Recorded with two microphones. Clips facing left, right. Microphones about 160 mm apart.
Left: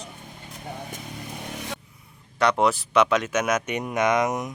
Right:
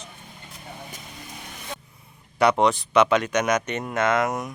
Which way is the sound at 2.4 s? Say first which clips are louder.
Right 2 dB; centre (ahead or behind).